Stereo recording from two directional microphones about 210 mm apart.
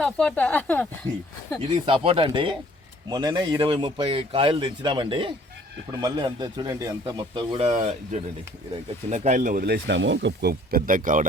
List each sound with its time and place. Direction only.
0.0 s speech: 5° left (ahead or behind)
1.7 s speech: 25° right (ahead or behind)
7.7 s speech: 35° right (ahead or behind)